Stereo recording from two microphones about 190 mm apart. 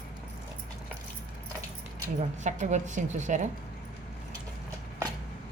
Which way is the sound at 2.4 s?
40° right (ahead or behind).